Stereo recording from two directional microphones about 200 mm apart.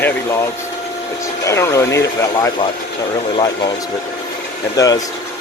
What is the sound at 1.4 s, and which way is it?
Speech, 15° left (ahead or behind).